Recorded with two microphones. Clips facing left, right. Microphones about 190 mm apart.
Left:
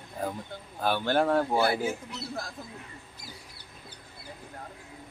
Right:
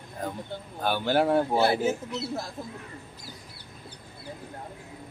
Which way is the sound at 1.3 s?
25° right (ahead or behind).